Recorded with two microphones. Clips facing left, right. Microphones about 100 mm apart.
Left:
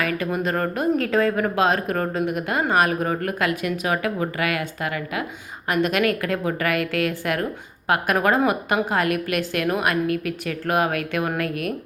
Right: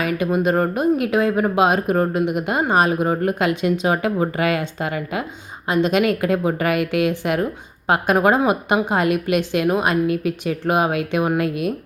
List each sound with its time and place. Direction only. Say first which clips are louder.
0.0 s a woman's voice: right 4 dB; 20° right (ahead or behind)